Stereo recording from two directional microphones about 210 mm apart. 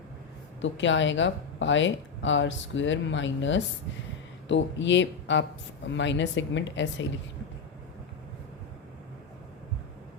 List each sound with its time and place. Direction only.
0.6 s speech: 60° left (ahead or behind)